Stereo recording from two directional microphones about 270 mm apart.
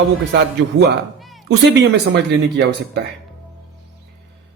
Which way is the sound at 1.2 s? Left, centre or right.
Centre.